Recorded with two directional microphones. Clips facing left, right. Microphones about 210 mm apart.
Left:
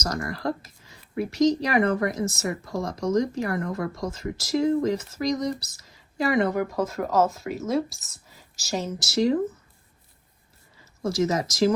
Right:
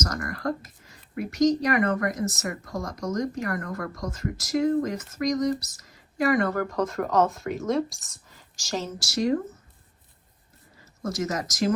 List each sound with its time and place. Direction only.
0.0 s speech: 30° left (ahead or behind); by 8.9 s 10° left (ahead or behind)
9.0 s speech: 25° left (ahead or behind)
11.0 s speech: 30° left (ahead or behind)